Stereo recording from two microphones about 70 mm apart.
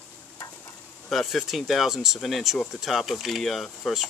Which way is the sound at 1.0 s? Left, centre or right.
Centre.